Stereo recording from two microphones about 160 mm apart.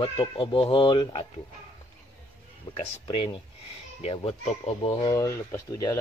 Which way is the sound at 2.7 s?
30° left (ahead or behind).